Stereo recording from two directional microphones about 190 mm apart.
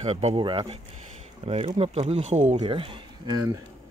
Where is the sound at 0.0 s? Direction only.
35° right (ahead or behind).